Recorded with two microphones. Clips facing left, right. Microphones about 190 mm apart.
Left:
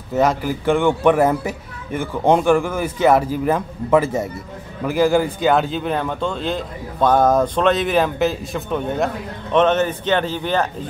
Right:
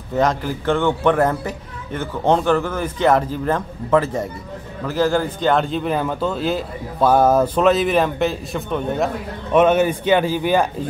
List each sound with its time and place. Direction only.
0.1 s a man's voice: 5° left (ahead or behind); by 10.7 s 10° right (ahead or behind)